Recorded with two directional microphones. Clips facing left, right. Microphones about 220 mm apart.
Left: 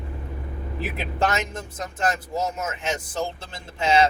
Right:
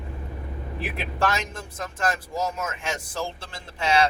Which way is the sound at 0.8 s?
20° left (ahead or behind).